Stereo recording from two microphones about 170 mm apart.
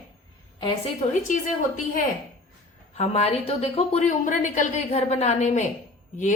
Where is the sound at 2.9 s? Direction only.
40° left (ahead or behind).